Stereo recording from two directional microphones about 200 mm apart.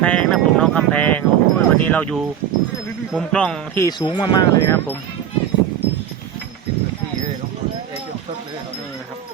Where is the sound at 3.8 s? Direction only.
20° left (ahead or behind).